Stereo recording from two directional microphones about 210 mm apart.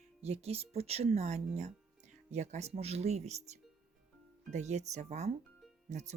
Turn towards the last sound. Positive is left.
turn(degrees=-35)  # may be behind; listen again after turning